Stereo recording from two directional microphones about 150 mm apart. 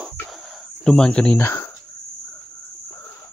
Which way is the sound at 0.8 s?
5° left (ahead or behind).